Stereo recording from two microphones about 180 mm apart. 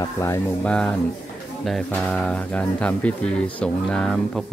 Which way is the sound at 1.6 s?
5° left (ahead or behind).